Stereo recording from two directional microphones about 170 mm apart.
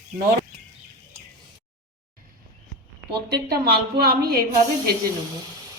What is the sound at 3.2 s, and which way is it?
A woman's voice, 70° right (ahead or behind).